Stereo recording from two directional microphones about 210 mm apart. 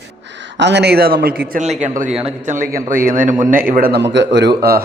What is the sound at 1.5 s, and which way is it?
A man's voice, 35° right (ahead or behind).